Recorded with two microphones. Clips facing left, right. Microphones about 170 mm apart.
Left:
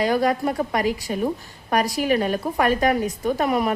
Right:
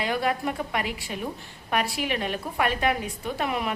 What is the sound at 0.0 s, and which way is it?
A woman's voice, 40° left (ahead or behind).